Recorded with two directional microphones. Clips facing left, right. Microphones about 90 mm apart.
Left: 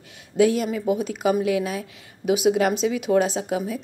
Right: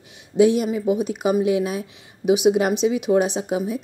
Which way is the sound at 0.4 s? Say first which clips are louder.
Right 3 dB; 20° right (ahead or behind).